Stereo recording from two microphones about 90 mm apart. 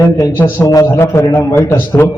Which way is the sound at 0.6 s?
40° left (ahead or behind).